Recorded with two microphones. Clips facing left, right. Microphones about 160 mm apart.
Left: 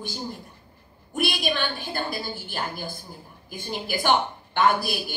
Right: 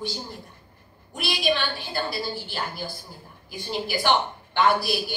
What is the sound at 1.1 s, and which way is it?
A woman's voice, 50° left (ahead or behind).